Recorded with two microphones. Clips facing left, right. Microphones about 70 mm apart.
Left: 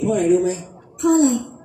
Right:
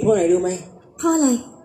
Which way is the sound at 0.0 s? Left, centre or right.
Right.